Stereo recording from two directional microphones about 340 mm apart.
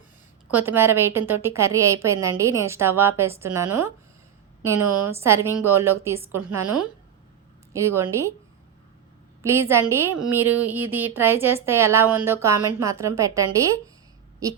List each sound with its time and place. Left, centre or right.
0.5 s a woman's voice: centre
9.4 s a woman's voice: centre